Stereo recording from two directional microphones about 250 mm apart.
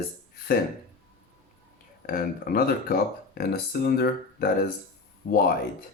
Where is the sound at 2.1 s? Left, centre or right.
Left.